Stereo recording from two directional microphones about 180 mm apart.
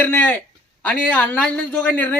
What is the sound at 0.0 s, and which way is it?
A man's voice, 10° left (ahead or behind).